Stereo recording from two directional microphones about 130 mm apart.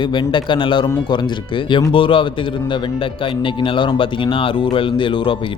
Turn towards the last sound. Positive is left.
turn(degrees=40)  # may be behind; listen again after turning